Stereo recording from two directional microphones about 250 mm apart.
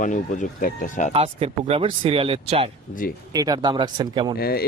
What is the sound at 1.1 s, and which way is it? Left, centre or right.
Speech, right.